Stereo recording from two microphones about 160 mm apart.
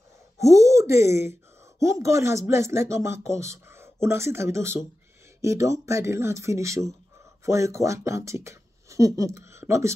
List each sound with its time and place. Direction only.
0.4 s a woman's voice: 20° right (ahead or behind)